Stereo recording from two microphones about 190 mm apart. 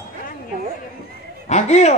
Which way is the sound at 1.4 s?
35° left (ahead or behind).